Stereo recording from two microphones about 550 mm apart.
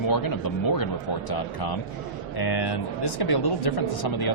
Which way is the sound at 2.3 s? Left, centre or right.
Left.